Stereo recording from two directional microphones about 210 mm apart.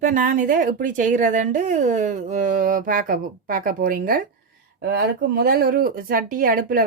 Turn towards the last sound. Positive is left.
turn(degrees=-40)  # may be behind; listen again after turning